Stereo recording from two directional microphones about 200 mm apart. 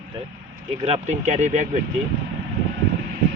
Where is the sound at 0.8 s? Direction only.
35° right (ahead or behind).